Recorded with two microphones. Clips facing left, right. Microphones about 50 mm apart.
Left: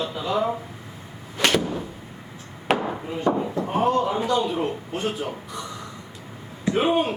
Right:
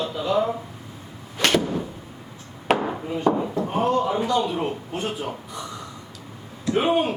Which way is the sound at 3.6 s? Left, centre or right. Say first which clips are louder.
Left 1 dB; centre.